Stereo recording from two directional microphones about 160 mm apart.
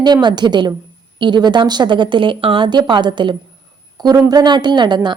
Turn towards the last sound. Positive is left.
turn(degrees=-30)  # may be behind; listen again after turning